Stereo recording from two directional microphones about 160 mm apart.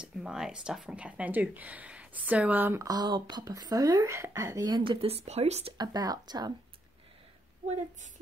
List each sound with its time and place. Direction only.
0.0 s speech: 5° right (ahead or behind); by 5.8 s 40° right (ahead or behind)
5.8 s speech: 25° right (ahead or behind)
7.6 s a woman's voice: 45° right (ahead or behind)